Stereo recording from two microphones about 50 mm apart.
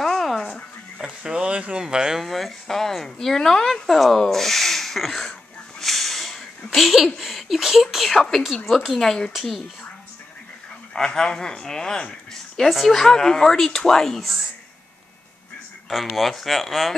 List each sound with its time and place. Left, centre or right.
0.0 s a sound: centre
1.2 s a sound: right
1.8 s speech: centre
2.2 s speech: centre
5.8 s snort: centre
6.7 s speech: centre
11.1 s speech: centre
12.6 s speech: centre
16.2 s speech: centre